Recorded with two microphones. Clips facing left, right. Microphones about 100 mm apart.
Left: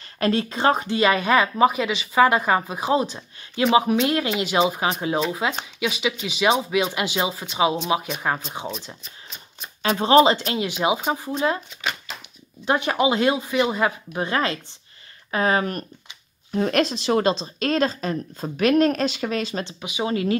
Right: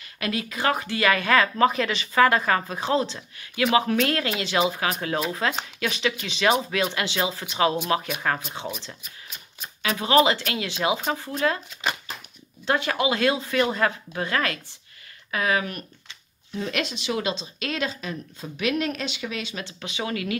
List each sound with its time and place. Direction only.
0.2 s speech: 30° left (ahead or behind)
5.3 s speech: 10° left (ahead or behind)
9.8 s speech: 30° left (ahead or behind)
12.6 s speech: 20° left (ahead or behind)
15.3 s speech: 35° left (ahead or behind)
19.6 s speech: 15° left (ahead or behind)